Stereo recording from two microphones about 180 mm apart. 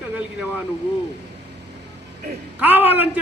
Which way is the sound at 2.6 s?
10° right (ahead or behind).